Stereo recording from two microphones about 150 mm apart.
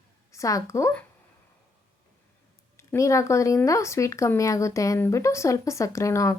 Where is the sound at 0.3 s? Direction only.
20° left (ahead or behind).